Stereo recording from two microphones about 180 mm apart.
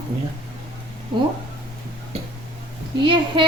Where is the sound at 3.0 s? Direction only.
30° right (ahead or behind).